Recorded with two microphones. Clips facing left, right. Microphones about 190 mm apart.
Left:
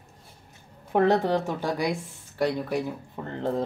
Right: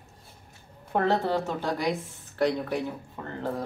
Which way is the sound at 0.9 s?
15° left (ahead or behind).